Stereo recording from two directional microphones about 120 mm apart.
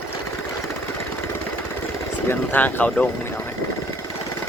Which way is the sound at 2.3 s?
15° left (ahead or behind).